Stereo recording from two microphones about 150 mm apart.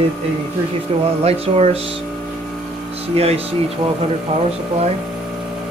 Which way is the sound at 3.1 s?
45° right (ahead or behind).